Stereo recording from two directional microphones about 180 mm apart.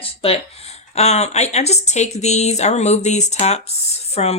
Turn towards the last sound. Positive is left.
turn(degrees=35)  # may be behind; listen again after turning